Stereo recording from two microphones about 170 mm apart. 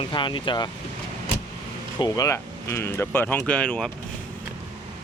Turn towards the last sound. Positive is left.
turn(degrees=5)  # may be behind; listen again after turning